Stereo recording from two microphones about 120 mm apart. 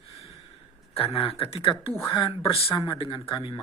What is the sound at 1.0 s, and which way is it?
Speech, 55° left (ahead or behind).